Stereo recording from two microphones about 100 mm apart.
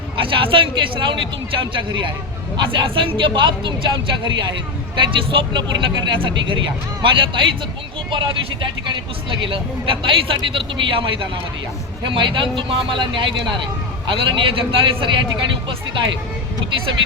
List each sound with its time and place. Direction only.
0.2 s speech: 60° right (ahead or behind)